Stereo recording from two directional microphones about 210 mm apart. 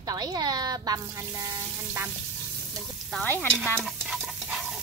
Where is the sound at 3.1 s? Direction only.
5° left (ahead or behind).